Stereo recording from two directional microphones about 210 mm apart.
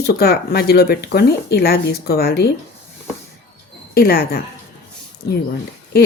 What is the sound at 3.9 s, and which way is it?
Speech, 45° left (ahead or behind).